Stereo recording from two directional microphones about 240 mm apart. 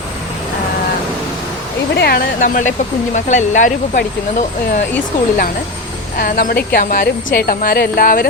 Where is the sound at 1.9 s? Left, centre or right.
Left.